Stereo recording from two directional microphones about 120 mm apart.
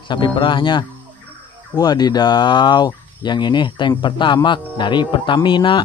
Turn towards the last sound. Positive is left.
turn(degrees=40)  # may be behind; listen again after turning